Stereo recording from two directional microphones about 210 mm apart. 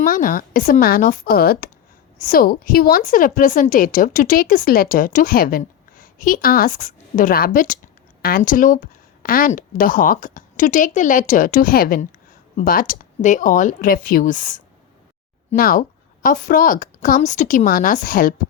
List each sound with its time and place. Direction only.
0.0 s a woman's voice: 40° left (ahead or behind)